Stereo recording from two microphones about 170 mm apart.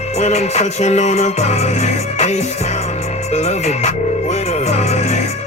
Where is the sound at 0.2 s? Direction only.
40° left (ahead or behind).